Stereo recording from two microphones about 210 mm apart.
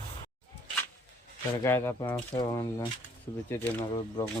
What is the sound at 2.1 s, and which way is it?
Speech, 20° left (ahead or behind).